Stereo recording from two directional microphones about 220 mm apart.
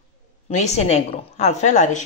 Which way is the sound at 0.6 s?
30° left (ahead or behind).